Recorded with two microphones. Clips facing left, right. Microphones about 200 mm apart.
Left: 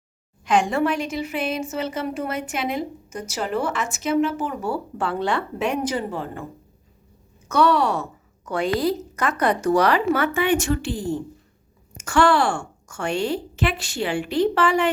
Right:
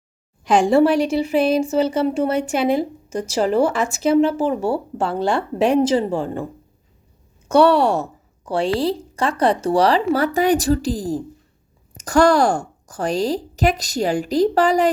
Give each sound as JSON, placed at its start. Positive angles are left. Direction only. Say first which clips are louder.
{"t": 0.4, "sound": "a woman's voice", "louder": "right 6 dB", "side_deg": -30}
{"t": 4.9, "sound": "a woman's voice", "louder": "right 4 dB", "side_deg": -40}
{"t": 7.4, "sound": "a woman's voice", "louder": "right 5 dB", "side_deg": -30}